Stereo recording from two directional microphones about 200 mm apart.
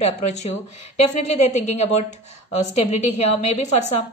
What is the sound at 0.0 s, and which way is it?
A woman's voice, 35° left (ahead or behind).